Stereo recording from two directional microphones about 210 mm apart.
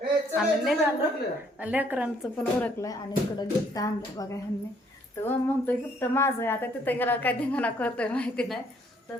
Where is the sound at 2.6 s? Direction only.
15° left (ahead or behind).